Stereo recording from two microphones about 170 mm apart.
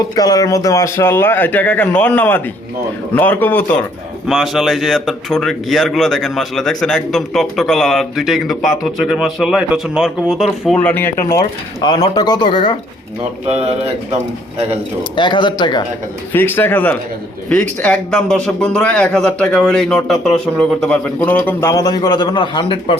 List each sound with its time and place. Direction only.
0.2 s a man's voice: 20° left (ahead or behind)
4.3 s speech: centre (ahead or behind)
10.8 s a man's voice: 10° left (ahead or behind)
11.8 s speech: 25° left (ahead or behind)
13.5 s speech: 40° right (ahead or behind)
15.1 s speech: 30° left (ahead or behind)
16.3 s a man's voice: 10° left (ahead or behind); by 23.0 s 30° left (ahead or behind)